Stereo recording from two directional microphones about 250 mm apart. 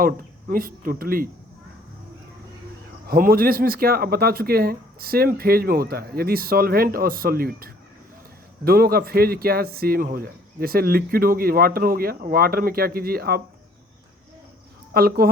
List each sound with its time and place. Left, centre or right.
0.0 s speech: right
3.1 s speech: right
14.9 s speech: right